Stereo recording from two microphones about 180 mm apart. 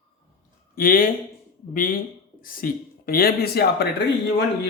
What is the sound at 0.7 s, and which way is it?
A man's voice, 55° left (ahead or behind).